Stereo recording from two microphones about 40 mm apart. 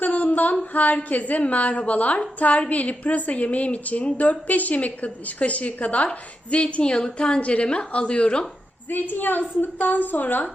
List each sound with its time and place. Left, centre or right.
0.0 s a sound: left
0.7 s a woman's voice: left
6.9 s a woman's voice: centre
8.9 s a woman's voice: left